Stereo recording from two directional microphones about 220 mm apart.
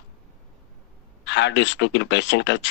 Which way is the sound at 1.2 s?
55° left (ahead or behind).